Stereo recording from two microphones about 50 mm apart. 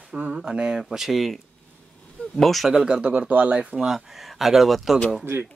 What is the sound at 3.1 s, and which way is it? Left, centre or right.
Speech, right.